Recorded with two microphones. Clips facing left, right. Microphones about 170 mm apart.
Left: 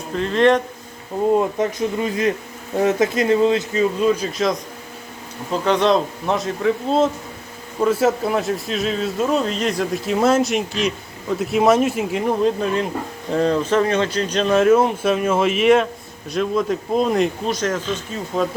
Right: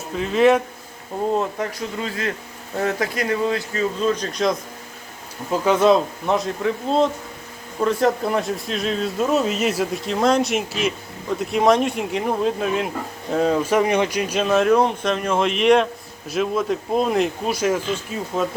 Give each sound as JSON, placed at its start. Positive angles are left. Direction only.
{"t": 0.1, "sound": "speech", "side_deg": -5}
{"t": 1.4, "sound": "speech", "side_deg": 20}